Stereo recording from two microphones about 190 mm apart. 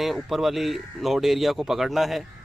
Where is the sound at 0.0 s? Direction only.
Centre (ahead or behind).